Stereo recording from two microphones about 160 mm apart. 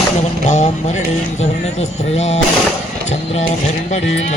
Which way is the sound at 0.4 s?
45° left (ahead or behind).